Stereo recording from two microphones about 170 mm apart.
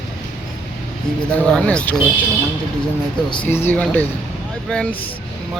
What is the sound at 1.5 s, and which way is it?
Speech, 5° left (ahead or behind).